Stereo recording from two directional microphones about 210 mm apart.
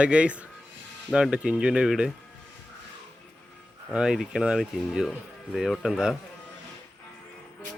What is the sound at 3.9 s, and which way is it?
Speech, 5° right (ahead or behind).